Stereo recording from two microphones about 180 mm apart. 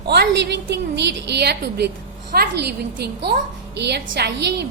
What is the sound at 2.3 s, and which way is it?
A woman's voice, 55° right (ahead or behind).